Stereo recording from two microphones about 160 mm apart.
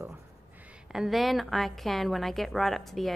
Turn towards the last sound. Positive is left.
turn(degrees=0)  # may be behind; listen again after turning